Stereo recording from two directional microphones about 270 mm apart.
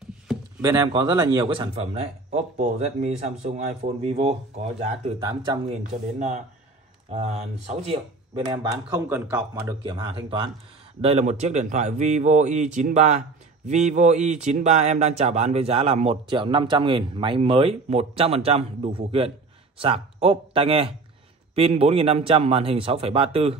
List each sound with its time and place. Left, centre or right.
0.6 s speech: centre
8.5 s speech: centre